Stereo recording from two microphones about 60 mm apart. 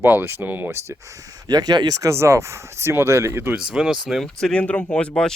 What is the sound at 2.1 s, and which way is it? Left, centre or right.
Speech, right.